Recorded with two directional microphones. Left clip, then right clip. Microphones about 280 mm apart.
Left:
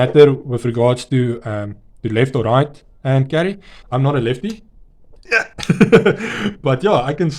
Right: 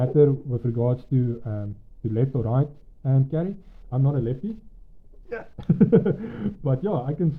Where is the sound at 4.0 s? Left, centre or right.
Left.